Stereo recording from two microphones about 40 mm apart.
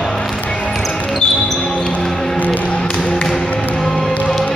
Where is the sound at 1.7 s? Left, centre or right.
Left.